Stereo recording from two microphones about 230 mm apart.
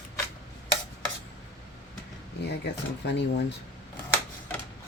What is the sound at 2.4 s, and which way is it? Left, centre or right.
Speech, left.